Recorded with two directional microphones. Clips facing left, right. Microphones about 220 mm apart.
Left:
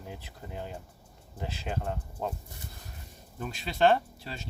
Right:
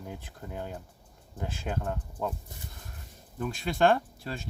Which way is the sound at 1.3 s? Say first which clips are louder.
Right 1 dB; 50° right (ahead or behind).